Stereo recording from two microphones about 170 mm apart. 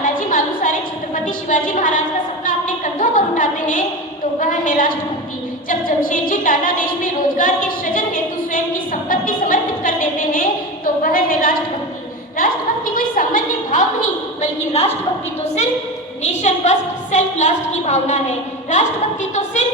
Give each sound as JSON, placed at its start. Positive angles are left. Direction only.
{"t": 0.0, "sound": "a sound", "side_deg": 55}
{"t": 4.4, "sound": "a woman's voice", "side_deg": 50}
{"t": 16.2, "sound": "a woman's voice", "side_deg": 45}